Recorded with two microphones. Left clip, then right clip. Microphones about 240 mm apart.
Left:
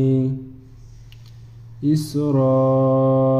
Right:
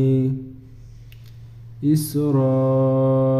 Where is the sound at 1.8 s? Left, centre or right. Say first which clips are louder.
Even; centre.